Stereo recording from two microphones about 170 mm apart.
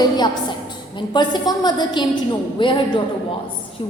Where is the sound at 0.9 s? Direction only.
25° left (ahead or behind).